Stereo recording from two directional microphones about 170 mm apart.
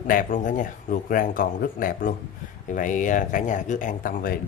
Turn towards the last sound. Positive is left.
turn(degrees=55)  # may be behind; listen again after turning